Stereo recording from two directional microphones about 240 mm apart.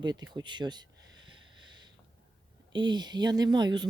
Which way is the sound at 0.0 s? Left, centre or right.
Centre.